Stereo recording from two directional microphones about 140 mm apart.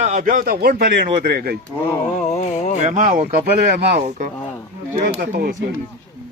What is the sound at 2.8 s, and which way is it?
A man's voice, 60° right (ahead or behind).